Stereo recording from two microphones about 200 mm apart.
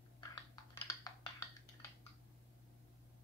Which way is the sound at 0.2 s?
20° left (ahead or behind).